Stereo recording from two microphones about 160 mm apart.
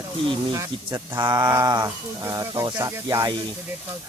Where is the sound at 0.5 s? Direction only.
20° right (ahead or behind).